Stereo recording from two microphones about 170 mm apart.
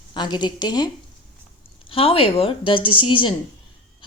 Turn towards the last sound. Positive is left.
turn(degrees=30)  # may be behind; listen again after turning